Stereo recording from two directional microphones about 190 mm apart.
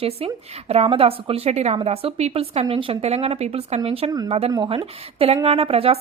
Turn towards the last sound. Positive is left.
turn(degrees=-30)  # may be behind; listen again after turning